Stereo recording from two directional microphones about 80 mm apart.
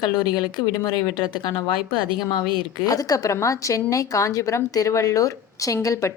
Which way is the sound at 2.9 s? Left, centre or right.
Left.